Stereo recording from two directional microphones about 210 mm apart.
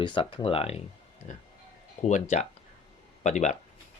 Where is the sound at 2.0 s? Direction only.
35° left (ahead or behind).